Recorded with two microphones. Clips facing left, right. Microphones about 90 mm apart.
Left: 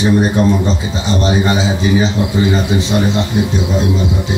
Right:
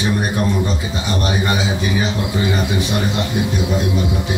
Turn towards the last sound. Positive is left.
turn(degrees=25)  # may be behind; listen again after turning